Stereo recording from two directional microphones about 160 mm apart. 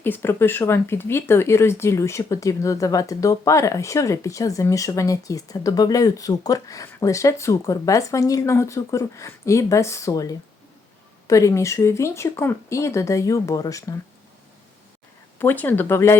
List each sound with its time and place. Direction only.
0.0 s speech: 15° left (ahead or behind)
15.4 s speech: 15° left (ahead or behind)